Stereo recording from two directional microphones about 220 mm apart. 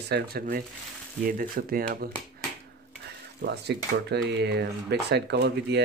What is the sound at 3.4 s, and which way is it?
Speech, 50° right (ahead or behind).